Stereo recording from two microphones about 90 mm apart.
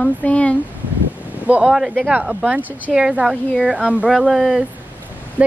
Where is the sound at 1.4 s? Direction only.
15° right (ahead or behind).